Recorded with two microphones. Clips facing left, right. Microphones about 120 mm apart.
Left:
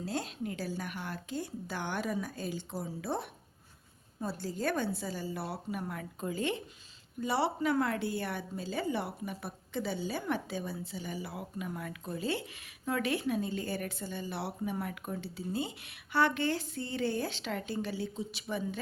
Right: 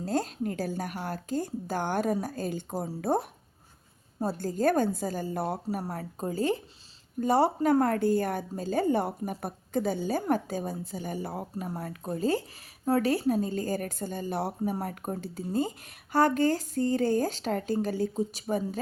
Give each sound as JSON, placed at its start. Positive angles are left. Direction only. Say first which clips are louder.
{"t": 0.0, "sound": "a woman's voice", "louder": "right 7 dB", "side_deg": -45}